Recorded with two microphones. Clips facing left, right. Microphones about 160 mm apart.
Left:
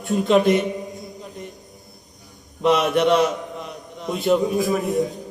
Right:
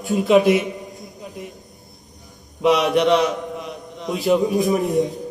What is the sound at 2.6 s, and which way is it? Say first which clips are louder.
A man's voice: right 1 dB; centre (ahead or behind).